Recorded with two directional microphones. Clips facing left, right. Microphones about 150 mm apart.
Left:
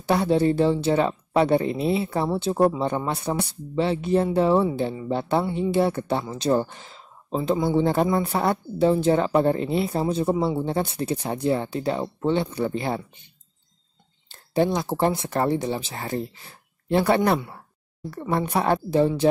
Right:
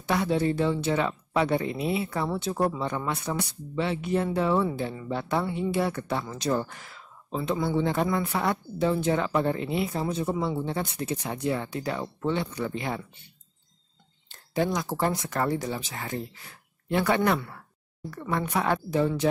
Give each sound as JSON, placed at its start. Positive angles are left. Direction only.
{"t": 0.0, "sound": "speech", "side_deg": 30}
{"t": 14.3, "sound": "speech", "side_deg": 30}